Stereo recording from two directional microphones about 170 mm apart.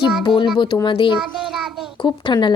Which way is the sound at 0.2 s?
30° left (ahead or behind).